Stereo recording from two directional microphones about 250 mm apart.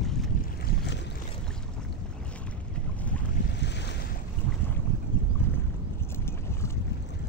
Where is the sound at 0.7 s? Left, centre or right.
Left.